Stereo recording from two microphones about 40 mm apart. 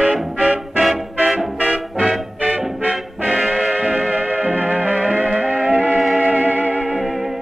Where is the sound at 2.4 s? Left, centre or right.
Right.